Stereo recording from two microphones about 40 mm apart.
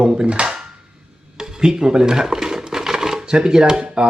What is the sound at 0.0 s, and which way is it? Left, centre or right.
Speech, right.